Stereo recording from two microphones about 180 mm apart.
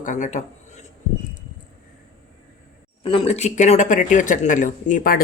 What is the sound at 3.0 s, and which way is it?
Speech, 30° left (ahead or behind).